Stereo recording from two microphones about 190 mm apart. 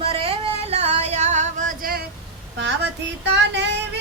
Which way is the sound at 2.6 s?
65° right (ahead or behind).